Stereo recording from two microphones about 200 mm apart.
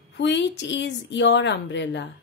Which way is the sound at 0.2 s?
60° left (ahead or behind).